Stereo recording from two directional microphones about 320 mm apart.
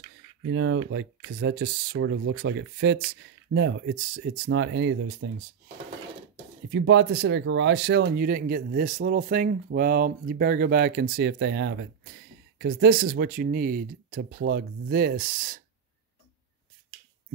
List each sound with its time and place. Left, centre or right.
0.5 s speech: right
6.7 s speech: right